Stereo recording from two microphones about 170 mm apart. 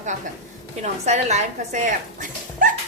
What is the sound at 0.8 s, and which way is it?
A woman's voice, 40° right (ahead or behind).